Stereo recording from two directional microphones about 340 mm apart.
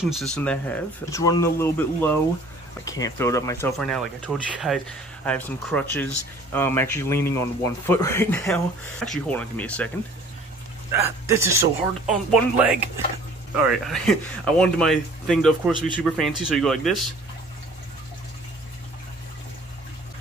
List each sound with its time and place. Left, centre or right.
0.0 s speech: centre
10.9 s speech: centre